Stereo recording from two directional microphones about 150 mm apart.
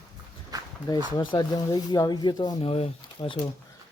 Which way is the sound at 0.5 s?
25° right (ahead or behind).